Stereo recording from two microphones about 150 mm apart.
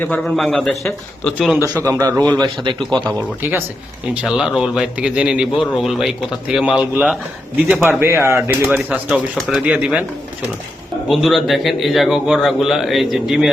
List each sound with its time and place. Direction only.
0.1 s a man's voice: centre (ahead or behind)
1.8 s a man's voice: 20° right (ahead or behind)
4.1 s a man's voice: 5° right (ahead or behind)
11.1 s a man's voice: centre (ahead or behind)